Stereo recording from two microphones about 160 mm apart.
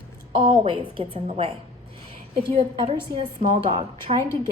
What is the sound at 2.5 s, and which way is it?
A woman's voice, 40° right (ahead or behind).